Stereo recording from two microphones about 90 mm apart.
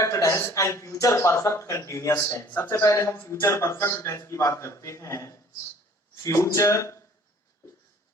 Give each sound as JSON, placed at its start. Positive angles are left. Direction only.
{"t": 0.0, "sound": "speech", "side_deg": 35}